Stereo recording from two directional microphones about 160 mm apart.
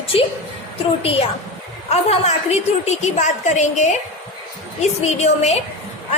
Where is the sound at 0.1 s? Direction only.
35° left (ahead or behind).